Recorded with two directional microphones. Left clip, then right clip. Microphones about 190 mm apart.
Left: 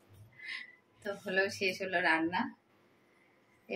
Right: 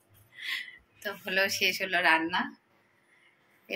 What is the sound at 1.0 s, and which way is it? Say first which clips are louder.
A woman's voice: right 4 dB; centre (ahead or behind).